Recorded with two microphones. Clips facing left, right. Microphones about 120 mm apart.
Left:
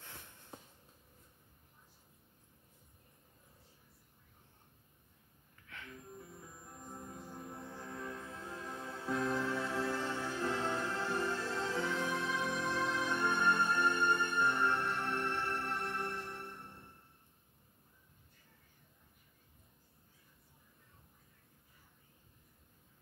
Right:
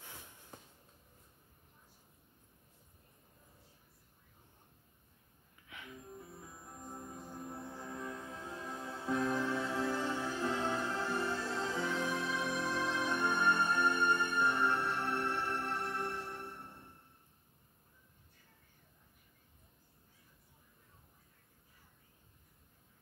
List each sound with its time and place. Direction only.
5.7 s music: 15° right (ahead or behind)
6.6 s music: 25° right (ahead or behind)
7.2 s music: 10° right (ahead or behind)